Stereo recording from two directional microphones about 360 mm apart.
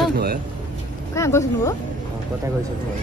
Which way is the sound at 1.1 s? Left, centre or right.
Centre.